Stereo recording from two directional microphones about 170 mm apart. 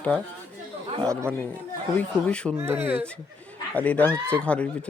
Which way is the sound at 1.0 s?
15° right (ahead or behind).